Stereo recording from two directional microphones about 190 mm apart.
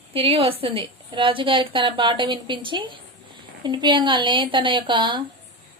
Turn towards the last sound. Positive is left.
turn(degrees=-25)  # may be behind; listen again after turning